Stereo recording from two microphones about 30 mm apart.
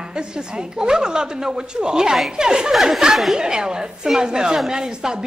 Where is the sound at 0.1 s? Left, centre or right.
Right.